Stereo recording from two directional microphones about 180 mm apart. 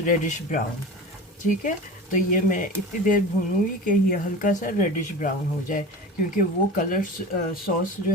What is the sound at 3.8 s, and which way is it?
Speech, 50° left (ahead or behind).